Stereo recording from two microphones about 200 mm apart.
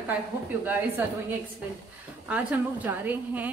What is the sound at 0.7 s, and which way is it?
Speech, 10° right (ahead or behind).